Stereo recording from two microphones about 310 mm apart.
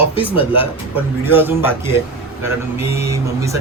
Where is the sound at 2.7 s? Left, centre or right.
Centre.